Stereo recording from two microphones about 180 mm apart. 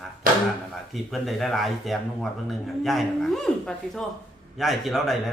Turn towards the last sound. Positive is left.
turn(degrees=0)  # may be behind; listen again after turning